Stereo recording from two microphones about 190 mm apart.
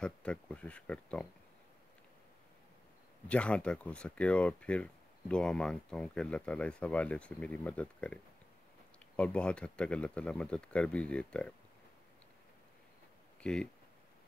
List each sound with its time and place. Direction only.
0.0 s a sound: 5° left (ahead or behind)
3.3 s speech: 5° left (ahead or behind)
13.4 s speech: 5° left (ahead or behind)